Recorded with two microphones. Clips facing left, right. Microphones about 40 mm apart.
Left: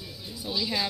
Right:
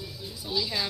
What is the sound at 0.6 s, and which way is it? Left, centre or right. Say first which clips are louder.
Speech: left 1 dB; centre.